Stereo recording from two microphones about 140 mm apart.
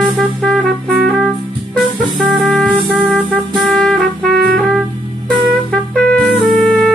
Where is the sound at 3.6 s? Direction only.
5° left (ahead or behind).